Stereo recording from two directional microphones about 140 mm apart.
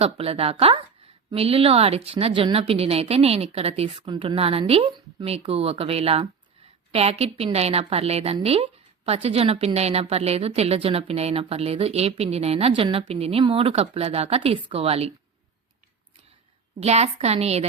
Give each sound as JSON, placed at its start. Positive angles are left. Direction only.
{"t": 0.0, "sound": "a woman's voice", "side_deg": -45}
{"t": 16.8, "sound": "a woman's voice", "side_deg": -50}